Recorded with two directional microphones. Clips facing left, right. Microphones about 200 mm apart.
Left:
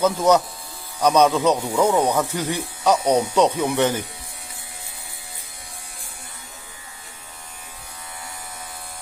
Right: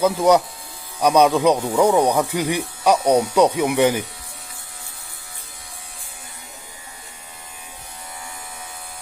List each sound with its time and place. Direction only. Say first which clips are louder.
0.0 s speech: right 2 dB; 10° right (ahead or behind)